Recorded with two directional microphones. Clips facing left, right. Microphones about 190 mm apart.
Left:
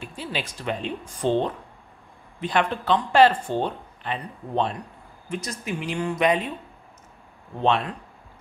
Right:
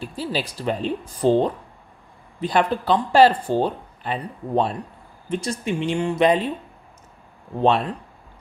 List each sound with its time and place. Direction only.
0.0 s speech: 35° right (ahead or behind)
7.6 s speech: 35° right (ahead or behind)